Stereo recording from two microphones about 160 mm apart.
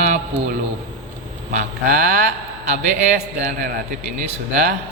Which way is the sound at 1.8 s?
60° right (ahead or behind).